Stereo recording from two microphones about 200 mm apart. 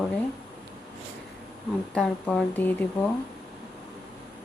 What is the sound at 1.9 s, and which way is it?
A woman's voice, 5° left (ahead or behind).